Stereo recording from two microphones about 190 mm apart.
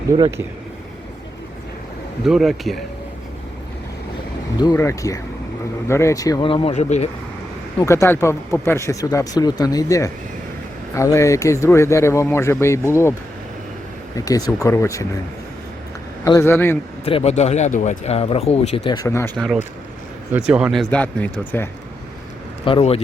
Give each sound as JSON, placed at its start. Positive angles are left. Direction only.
{"t": 0.2, "sound": "speech", "side_deg": -15}
{"t": 2.2, "sound": "speech", "side_deg": 0}
{"t": 4.5, "sound": "speech", "side_deg": 20}
{"t": 7.8, "sound": "speech", "side_deg": 15}
{"t": 14.2, "sound": "speech", "side_deg": 20}
{"t": 16.2, "sound": "speech", "side_deg": 15}
{"t": 17.1, "sound": "speech", "side_deg": 30}
{"t": 18.9, "sound": "speech", "side_deg": 15}
{"t": 20.5, "sound": "speech", "side_deg": -5}
{"t": 22.6, "sound": "speech", "side_deg": 30}